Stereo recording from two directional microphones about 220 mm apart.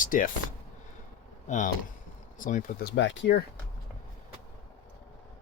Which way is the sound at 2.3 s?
35° left (ahead or behind).